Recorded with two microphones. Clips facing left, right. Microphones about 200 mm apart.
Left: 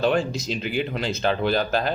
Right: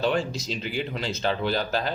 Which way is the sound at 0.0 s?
55° left (ahead or behind).